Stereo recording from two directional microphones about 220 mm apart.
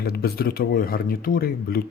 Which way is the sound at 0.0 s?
45° left (ahead or behind).